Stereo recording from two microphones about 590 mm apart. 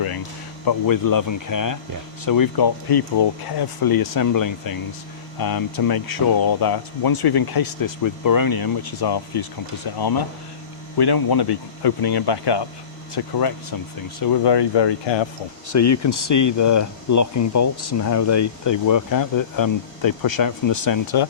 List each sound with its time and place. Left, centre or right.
0.6 s speech: left
15.7 s speech: left